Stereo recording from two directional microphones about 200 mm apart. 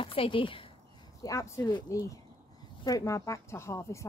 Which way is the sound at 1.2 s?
15° left (ahead or behind).